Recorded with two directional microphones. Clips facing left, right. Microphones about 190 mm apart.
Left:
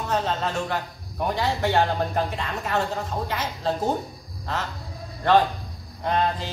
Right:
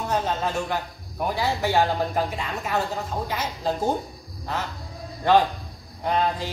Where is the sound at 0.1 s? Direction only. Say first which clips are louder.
Even; 10° right (ahead or behind).